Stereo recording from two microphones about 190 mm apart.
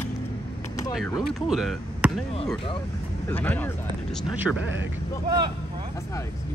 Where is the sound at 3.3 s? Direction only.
10° left (ahead or behind).